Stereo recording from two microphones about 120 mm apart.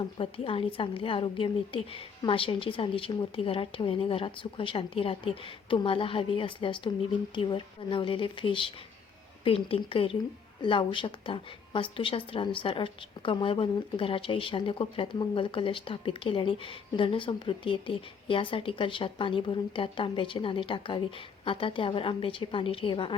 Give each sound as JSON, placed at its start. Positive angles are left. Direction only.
{"t": 0.2, "sound": "a woman's voice", "side_deg": 50}